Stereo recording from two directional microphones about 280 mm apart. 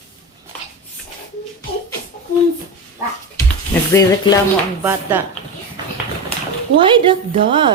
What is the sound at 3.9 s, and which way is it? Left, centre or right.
Speech, centre.